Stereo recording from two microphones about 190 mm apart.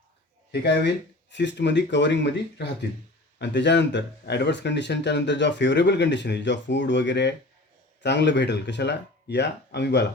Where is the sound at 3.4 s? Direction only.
65° left (ahead or behind).